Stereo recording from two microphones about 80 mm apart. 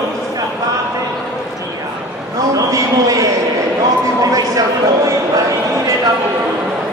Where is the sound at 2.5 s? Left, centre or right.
Right.